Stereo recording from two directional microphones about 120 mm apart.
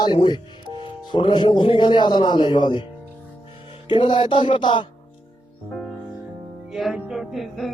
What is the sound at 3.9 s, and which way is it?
Speech, 40° left (ahead or behind).